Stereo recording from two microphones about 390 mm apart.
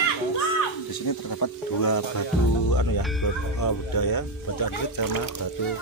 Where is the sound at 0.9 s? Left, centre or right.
Left.